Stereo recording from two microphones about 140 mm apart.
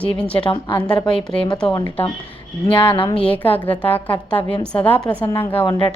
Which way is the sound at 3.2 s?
10° left (ahead or behind).